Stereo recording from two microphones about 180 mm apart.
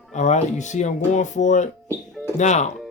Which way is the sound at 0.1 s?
40° left (ahead or behind).